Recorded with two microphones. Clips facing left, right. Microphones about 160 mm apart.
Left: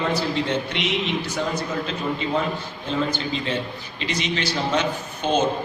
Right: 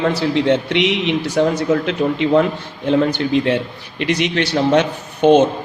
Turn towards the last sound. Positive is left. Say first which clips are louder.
# right 10 dB
turn(degrees=-65)  # may be behind; listen again after turning